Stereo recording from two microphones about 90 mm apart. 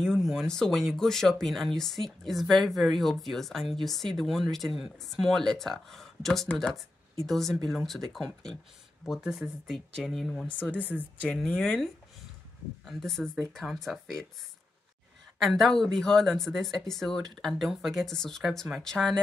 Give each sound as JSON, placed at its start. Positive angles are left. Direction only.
{"t": 0.0, "sound": "speech", "side_deg": 5}
{"t": 10.6, "sound": "speech", "side_deg": 20}
{"t": 12.8, "sound": "speech", "side_deg": 5}
{"t": 15.4, "sound": "speech", "side_deg": 5}